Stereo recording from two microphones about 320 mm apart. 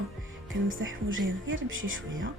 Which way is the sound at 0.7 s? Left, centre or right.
Right.